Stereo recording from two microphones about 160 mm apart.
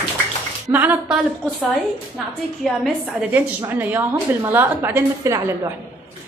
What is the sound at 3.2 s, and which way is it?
A woman's voice, 15° right (ahead or behind).